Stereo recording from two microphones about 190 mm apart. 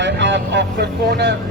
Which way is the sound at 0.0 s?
70° right (ahead or behind).